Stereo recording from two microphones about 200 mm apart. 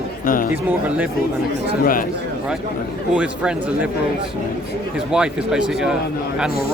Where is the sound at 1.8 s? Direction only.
45° left (ahead or behind).